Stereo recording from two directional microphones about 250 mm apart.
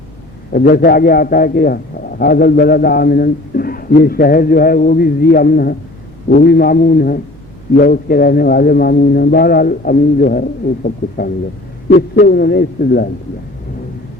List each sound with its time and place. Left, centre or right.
0.5 s a man's voice: left
11.9 s a man's voice: left